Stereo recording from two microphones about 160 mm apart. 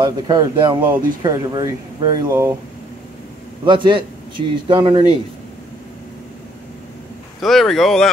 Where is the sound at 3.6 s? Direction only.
30° right (ahead or behind).